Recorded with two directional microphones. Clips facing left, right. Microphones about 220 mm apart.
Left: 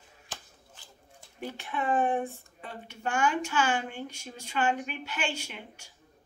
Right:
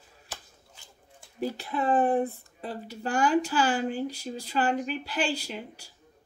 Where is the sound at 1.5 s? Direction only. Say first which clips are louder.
Right 3 dB; 35° right (ahead or behind).